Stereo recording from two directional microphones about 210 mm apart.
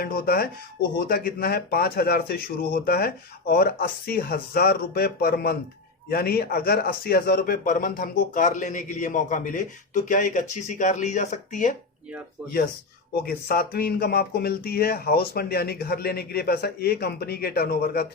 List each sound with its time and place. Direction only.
0.0 s speech: 45° left (ahead or behind)
13.2 s speech: 45° left (ahead or behind)